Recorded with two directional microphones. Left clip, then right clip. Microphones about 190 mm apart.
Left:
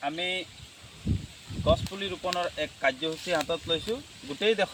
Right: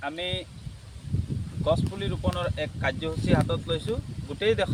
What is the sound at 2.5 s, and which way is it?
Speech, 25° right (ahead or behind).